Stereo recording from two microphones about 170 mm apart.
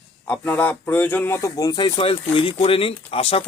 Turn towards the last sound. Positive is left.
turn(degrees=35)  # may be behind; listen again after turning